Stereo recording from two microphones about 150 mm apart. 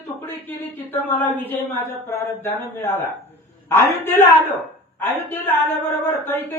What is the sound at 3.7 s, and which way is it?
Speech, 15° left (ahead or behind).